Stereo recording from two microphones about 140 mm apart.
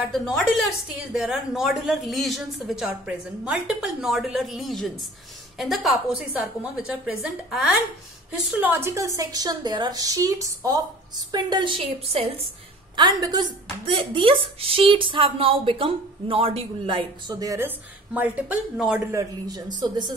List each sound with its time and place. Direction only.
0.0 s a woman's voice: centre (ahead or behind); by 12.3 s 45° right (ahead or behind)
12.9 s a woman's voice: 30° right (ahead or behind)
13.8 s a woman's voice: 40° right (ahead or behind)
17.6 s a woman's voice: 10° right (ahead or behind)
19.1 s a woman's voice: 25° right (ahead or behind)